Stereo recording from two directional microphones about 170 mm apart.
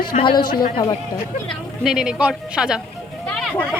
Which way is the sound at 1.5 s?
Centre (ahead or behind).